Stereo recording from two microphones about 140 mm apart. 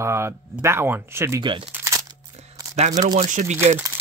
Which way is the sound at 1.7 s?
25° right (ahead or behind).